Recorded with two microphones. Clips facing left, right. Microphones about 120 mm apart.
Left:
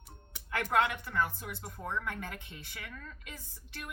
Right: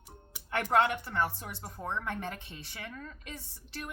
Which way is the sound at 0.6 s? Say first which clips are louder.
Right 3 dB; 35° right (ahead or behind).